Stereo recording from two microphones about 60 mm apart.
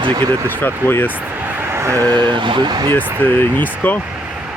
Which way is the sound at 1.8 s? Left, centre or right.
Right.